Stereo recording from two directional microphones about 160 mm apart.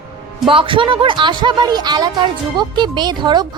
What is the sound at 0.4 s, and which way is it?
Speech, 30° right (ahead or behind).